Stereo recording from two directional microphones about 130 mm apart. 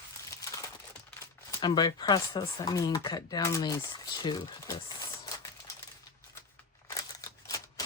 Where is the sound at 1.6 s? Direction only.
35° left (ahead or behind).